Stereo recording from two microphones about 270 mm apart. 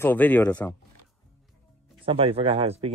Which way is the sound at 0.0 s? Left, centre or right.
Centre.